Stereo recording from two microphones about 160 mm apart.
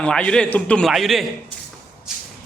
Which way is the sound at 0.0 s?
5° left (ahead or behind).